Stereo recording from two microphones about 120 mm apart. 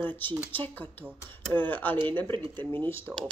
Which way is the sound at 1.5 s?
15° left (ahead or behind).